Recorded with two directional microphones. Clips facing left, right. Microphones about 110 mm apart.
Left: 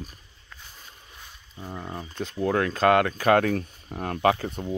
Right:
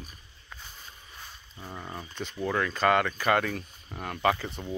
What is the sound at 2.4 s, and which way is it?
Speech, 45° left (ahead or behind).